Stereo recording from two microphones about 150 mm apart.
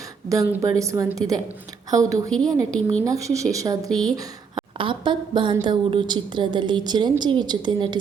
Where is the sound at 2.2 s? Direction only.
5° left (ahead or behind).